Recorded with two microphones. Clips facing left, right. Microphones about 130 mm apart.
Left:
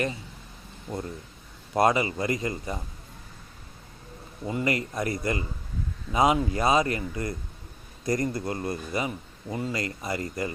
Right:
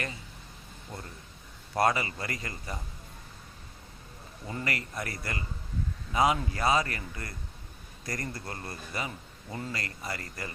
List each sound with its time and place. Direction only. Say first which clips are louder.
1.7 s a man's voice: left 5 dB; 20° left (ahead or behind)
4.4 s a man's voice: left 8 dB; 20° left (ahead or behind)